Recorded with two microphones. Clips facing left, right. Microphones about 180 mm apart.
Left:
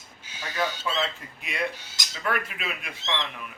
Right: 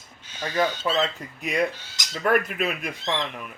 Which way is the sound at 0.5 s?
50° right (ahead or behind).